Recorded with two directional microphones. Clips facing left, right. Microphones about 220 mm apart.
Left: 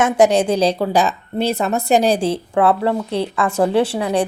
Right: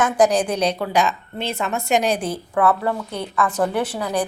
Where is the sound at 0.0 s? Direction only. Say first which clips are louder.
Left 3 dB; 25° left (ahead or behind).